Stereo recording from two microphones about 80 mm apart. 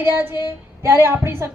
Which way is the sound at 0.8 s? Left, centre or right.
Right.